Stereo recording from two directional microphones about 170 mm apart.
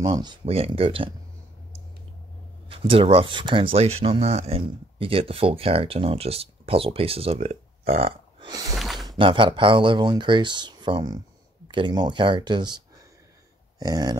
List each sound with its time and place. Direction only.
0.0 s speech: 25° right (ahead or behind)
2.7 s speech: 30° right (ahead or behind)
8.5 s speech: 20° right (ahead or behind)
8.7 s a sound: centre (ahead or behind)
9.0 s speech: 25° right (ahead or behind)